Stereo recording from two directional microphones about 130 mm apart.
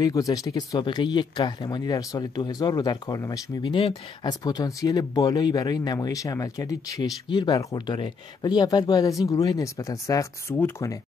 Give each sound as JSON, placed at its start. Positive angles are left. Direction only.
{"t": 0.0, "sound": "speech", "side_deg": 30}
{"t": 3.7, "sound": "speech", "side_deg": 40}
{"t": 4.3, "sound": "speech", "side_deg": 30}